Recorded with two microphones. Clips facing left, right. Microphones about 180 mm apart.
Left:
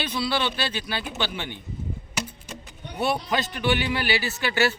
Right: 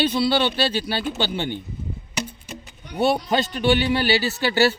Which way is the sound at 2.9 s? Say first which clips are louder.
Right 5 dB; 30° right (ahead or behind).